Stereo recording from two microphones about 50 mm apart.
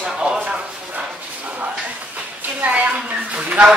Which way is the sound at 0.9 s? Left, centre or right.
Right.